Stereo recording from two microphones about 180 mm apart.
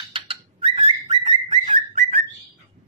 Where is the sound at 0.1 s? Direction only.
30° right (ahead or behind).